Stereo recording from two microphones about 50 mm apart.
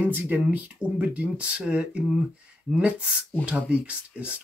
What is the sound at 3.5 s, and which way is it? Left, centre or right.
Speech, right.